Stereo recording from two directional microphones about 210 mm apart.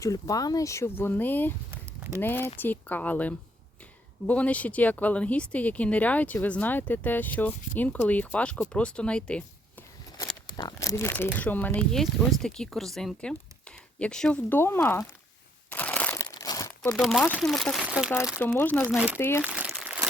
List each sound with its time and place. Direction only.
0.0 s speech: 15° left (ahead or behind)
1.7 s a sound: 15° right (ahead or behind)
2.2 s speech: 10° left (ahead or behind)
10.4 s speech: 20° left (ahead or behind)
15.7 s crushing: 5° left (ahead or behind)
16.3 s crumpling: 15° left (ahead or behind)
16.9 s speech: centre (ahead or behind)
18.3 s speech: 10° left (ahead or behind)
19.4 s crumpling: 5° right (ahead or behind)